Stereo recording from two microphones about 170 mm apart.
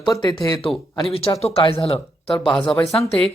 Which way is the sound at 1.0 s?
35° left (ahead or behind).